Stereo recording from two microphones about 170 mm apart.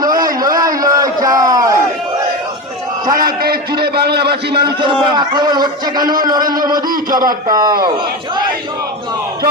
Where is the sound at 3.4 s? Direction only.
65° right (ahead or behind).